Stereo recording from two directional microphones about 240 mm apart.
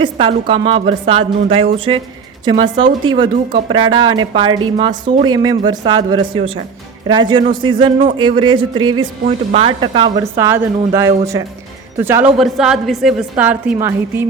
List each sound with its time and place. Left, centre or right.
0.0 s a woman's voice: right
9.2 s a woman's voice: right; by 14.3 s centre